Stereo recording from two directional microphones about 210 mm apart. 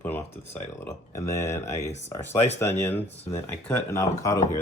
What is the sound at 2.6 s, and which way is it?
Speech, 10° left (ahead or behind).